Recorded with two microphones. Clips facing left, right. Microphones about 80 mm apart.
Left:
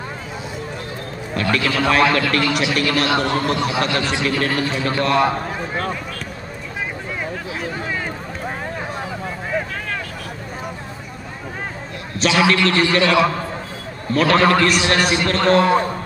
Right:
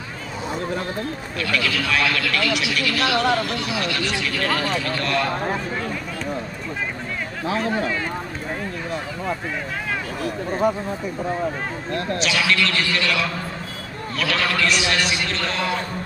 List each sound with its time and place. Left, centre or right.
1.3 s a man's voice: left
12.2 s a man's voice: left